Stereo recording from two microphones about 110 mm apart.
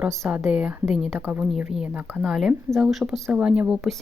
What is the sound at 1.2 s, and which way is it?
Speech, 15° right (ahead or behind).